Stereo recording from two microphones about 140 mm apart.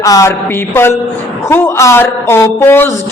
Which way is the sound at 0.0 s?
25° left (ahead or behind).